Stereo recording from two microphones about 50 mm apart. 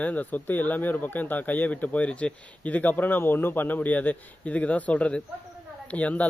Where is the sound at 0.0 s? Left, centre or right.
Left.